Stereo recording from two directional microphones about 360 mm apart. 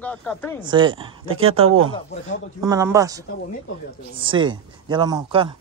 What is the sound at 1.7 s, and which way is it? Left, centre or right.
Speech, right.